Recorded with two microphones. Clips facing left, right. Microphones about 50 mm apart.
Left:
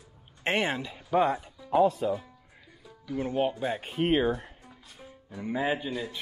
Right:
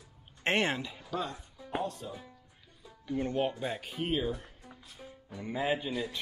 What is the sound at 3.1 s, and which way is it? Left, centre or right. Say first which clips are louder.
Speech: left 3 dB; centre.